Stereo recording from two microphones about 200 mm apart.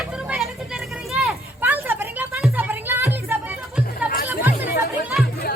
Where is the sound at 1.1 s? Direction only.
5° right (ahead or behind).